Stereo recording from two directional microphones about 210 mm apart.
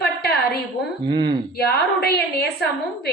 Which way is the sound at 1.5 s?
50° left (ahead or behind).